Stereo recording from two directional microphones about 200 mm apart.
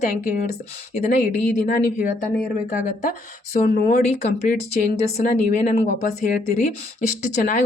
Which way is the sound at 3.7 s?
40° left (ahead or behind).